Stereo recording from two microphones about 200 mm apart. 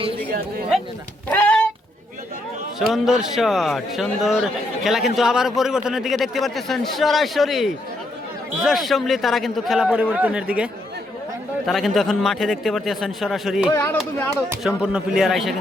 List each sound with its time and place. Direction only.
0.3 s speech: 45° right (ahead or behind)
1.3 s a sound: 5° left (ahead or behind)
2.7 s a man's voice: centre (ahead or behind)
13.7 s speech: 10° left (ahead or behind)
14.8 s a man's voice: 5° right (ahead or behind)